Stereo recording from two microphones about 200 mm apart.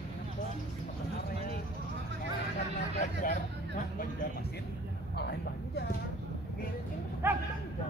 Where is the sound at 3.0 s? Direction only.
40° left (ahead or behind).